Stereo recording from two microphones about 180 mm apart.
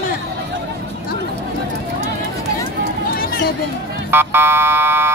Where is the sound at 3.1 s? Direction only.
60° left (ahead or behind).